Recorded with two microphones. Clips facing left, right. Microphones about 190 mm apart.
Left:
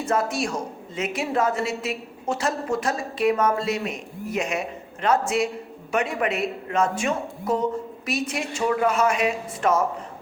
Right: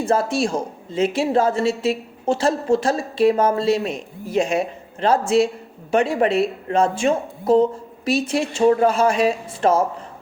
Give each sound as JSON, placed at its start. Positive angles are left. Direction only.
{"t": 0.0, "sound": "a woman's voice", "side_deg": -30}